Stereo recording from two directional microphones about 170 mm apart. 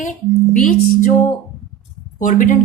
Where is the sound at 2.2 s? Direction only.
50° left (ahead or behind).